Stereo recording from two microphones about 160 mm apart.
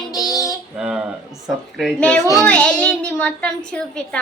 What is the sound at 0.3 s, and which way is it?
Child singing, 20° left (ahead or behind).